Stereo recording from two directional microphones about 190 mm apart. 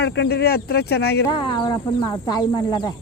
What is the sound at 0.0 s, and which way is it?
Speech, 60° left (ahead or behind).